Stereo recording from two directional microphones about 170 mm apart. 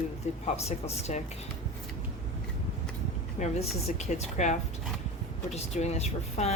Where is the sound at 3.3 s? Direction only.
40° left (ahead or behind).